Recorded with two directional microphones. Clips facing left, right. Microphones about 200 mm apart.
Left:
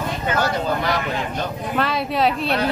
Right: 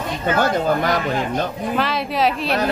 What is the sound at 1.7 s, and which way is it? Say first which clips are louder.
Speech: left 1 dB; centre (ahead or behind).